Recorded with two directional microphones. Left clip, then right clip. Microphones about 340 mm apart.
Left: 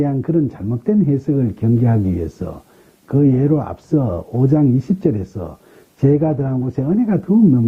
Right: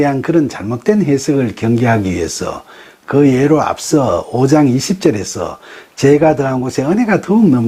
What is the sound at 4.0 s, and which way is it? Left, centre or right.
Speech, right.